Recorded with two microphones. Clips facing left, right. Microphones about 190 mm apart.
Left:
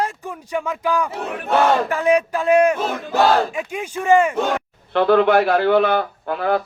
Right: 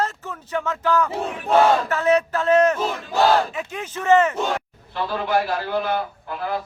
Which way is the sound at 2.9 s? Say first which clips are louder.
Left 5 dB; 50° left (ahead or behind).